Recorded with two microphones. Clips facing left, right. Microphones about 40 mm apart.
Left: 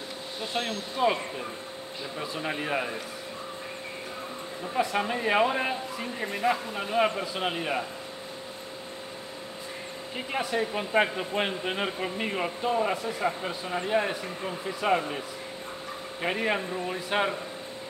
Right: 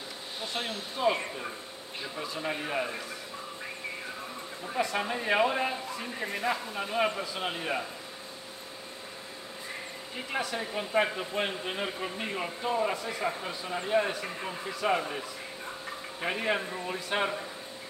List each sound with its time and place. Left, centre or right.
0.5 s speech: centre
2.1 s speech: centre
4.7 s speech: centre
10.3 s speech: centre
13.0 s a man's voice: centre
13.4 s speech: centre
16.2 s speech: centre